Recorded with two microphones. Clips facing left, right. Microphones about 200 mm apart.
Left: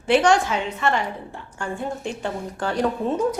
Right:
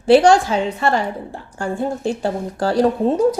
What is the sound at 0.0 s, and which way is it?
A woman's voice, 30° right (ahead or behind).